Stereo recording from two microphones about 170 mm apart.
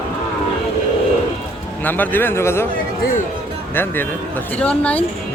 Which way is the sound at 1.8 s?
10° left (ahead or behind).